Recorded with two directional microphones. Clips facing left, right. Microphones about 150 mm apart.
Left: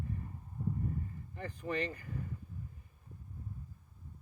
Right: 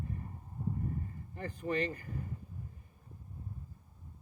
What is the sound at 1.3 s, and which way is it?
Speech, 40° right (ahead or behind).